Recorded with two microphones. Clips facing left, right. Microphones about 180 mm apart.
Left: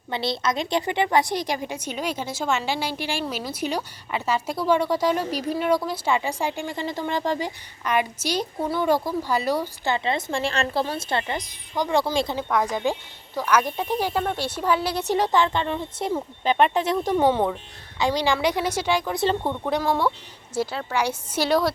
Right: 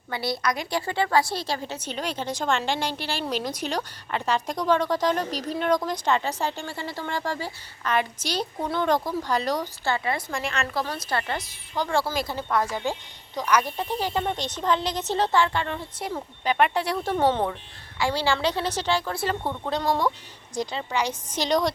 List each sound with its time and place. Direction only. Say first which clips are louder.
0.1 s a woman's voice: left 2 dB; 25° left (ahead or behind)
19.5 s a woman's voice: left 2 dB; 10° left (ahead or behind)